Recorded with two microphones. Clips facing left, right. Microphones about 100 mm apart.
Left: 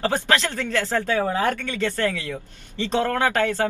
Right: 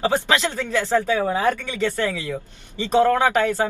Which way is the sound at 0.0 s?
15° right (ahead or behind).